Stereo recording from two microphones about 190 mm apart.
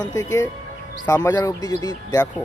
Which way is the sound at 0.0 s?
20° left (ahead or behind).